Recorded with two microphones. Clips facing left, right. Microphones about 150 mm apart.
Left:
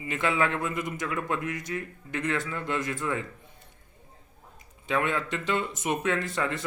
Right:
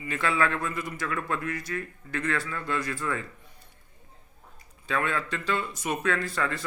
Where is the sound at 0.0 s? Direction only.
20° left (ahead or behind).